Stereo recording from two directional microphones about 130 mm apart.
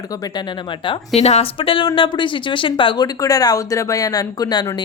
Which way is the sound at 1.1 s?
55° left (ahead or behind).